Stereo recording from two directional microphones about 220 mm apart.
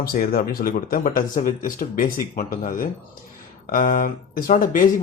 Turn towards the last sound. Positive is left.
turn(degrees=40)  # may be behind; listen again after turning